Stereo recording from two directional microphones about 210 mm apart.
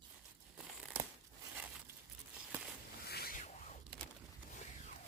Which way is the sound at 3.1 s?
45° left (ahead or behind).